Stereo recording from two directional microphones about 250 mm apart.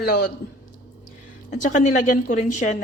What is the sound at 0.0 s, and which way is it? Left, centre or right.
Speech, left.